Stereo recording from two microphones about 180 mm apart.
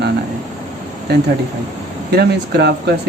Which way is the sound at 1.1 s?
70° right (ahead or behind).